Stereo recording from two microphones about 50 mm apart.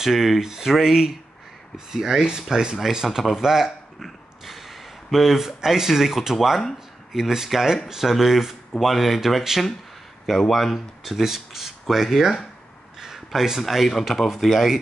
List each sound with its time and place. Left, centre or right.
0.0 s speech: centre
5.1 s speech: centre